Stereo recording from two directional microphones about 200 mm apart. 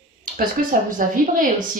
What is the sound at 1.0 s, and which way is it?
Speech, 45° right (ahead or behind).